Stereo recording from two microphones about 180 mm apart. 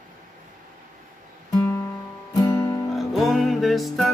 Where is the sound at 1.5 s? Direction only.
15° left (ahead or behind).